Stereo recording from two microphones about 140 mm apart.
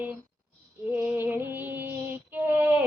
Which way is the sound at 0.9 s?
15° right (ahead or behind).